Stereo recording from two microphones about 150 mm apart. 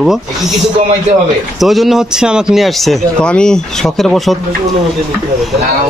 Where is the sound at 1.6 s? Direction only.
Centre (ahead or behind).